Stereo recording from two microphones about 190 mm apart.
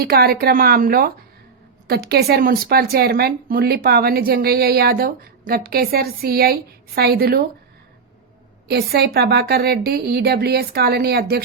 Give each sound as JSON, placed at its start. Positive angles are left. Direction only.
{"t": 0.0, "sound": "a woman's voice", "side_deg": -55}
{"t": 8.6, "sound": "speech", "side_deg": -55}